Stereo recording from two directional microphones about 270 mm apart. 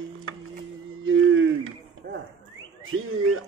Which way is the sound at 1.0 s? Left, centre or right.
Right.